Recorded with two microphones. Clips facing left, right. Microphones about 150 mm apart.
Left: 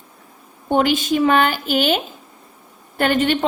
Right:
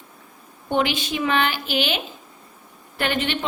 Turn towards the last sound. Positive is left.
turn(degrees=45)  # may be behind; listen again after turning